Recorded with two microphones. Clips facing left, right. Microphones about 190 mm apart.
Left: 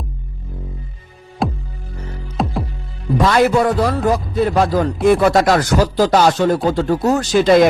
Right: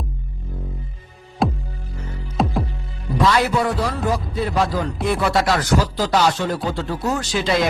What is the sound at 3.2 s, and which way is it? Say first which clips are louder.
A man's voice: left 5 dB; 50° left (ahead or behind).